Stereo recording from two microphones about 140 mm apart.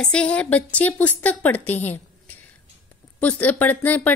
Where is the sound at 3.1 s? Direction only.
10° left (ahead or behind).